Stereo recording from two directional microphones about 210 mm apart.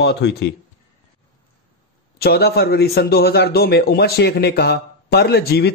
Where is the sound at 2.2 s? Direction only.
50° left (ahead or behind).